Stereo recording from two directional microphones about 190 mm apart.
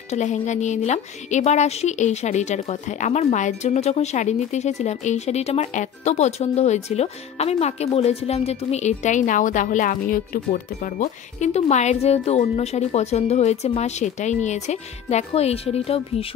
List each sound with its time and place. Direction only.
0.1 s a woman's voice: 40° left (ahead or behind)